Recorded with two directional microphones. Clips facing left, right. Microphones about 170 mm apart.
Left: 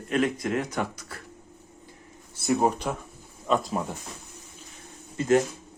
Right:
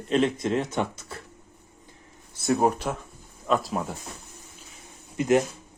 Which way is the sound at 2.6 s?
5° right (ahead or behind).